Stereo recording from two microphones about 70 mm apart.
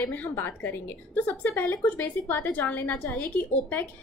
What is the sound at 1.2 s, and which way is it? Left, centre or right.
Speech, left.